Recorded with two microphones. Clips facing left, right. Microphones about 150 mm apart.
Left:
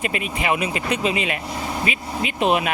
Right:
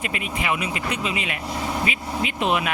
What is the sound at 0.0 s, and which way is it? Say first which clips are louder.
Speech: left 3 dB; 25° left (ahead or behind).